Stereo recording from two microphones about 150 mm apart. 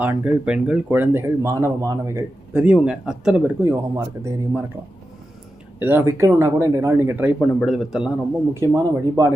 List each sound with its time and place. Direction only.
0.0 s speech: 10° right (ahead or behind)
3.6 s speech: 20° right (ahead or behind)
5.8 s speech: 15° right (ahead or behind)
7.3 s a man's voice: centre (ahead or behind)
8.5 s speech: 20° right (ahead or behind)